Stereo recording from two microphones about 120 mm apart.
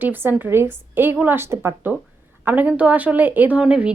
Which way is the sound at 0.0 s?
15° right (ahead or behind).